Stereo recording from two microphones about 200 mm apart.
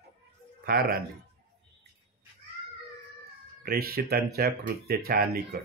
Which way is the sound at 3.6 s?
50° right (ahead or behind).